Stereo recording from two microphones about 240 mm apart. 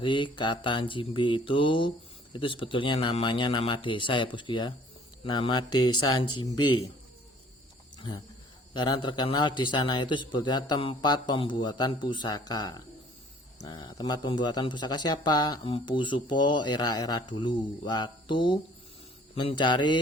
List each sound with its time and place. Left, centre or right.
0.0 s a man's voice: centre
5.8 s speech: left
6.1 s a man's voice: centre
7.9 s a man's voice: centre